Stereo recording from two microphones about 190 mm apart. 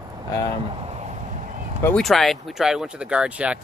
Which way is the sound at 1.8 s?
10° left (ahead or behind).